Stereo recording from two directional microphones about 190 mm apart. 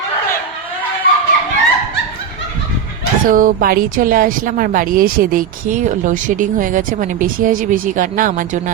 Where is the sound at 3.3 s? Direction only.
50° right (ahead or behind).